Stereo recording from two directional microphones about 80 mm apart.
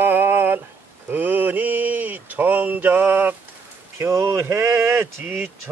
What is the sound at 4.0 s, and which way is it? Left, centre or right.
Speech, right.